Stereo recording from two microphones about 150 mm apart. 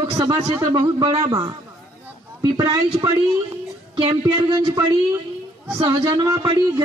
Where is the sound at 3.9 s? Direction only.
35° right (ahead or behind).